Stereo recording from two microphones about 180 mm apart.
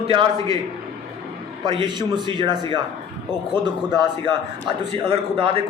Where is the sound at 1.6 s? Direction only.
25° right (ahead or behind).